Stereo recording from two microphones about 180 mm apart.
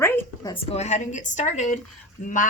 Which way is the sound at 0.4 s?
30° left (ahead or behind).